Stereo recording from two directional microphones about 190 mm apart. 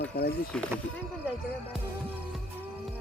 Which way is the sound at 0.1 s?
55° left (ahead or behind).